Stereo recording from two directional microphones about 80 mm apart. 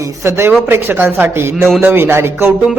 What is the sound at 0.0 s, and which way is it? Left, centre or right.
Speech, right.